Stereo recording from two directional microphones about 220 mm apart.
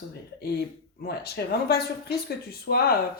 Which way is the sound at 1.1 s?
45° left (ahead or behind).